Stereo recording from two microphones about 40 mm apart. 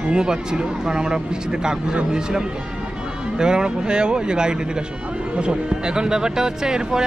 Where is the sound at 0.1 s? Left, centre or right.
Centre.